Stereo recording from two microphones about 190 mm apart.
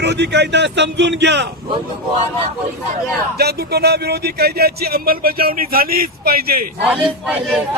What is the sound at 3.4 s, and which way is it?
Speech, 55° right (ahead or behind).